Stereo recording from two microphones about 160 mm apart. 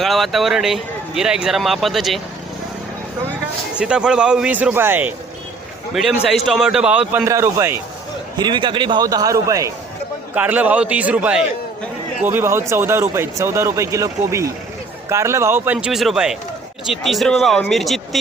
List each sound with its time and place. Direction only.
0.0 s speech: centre (ahead or behind)
3.8 s speech: 5° right (ahead or behind)
5.9 s speech: centre (ahead or behind)
7.3 s speech: 20° right (ahead or behind)
8.4 s a man's voice: 30° right (ahead or behind)
10.3 s speech: 10° right (ahead or behind)